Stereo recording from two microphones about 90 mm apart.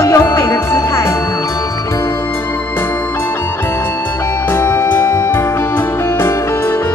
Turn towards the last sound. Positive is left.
turn(degrees=25)  # may be behind; listen again after turning